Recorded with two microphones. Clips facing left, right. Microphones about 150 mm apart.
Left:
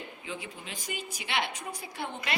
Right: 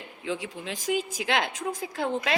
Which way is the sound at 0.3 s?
90° right.